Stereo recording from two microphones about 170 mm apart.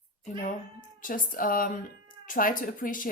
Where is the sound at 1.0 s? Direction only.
55° left (ahead or behind).